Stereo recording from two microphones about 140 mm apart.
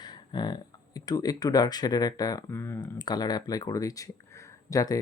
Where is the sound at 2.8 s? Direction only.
30° left (ahead or behind).